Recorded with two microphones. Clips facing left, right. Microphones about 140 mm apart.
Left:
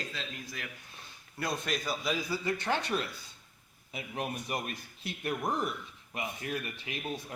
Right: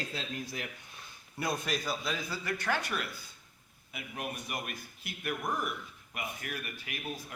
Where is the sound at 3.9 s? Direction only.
35° left (ahead or behind).